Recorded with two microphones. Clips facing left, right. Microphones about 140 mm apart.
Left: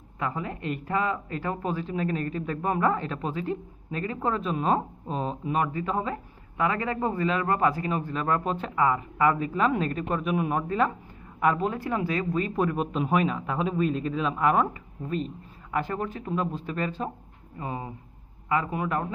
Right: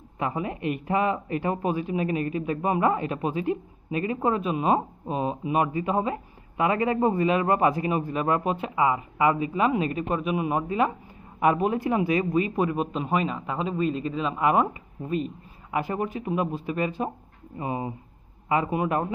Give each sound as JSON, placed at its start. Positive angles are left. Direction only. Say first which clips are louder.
{"t": 0.2, "sound": "speech", "louder": "right 3 dB", "side_deg": -15}